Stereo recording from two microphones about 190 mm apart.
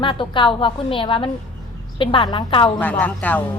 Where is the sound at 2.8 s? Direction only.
10° left (ahead or behind).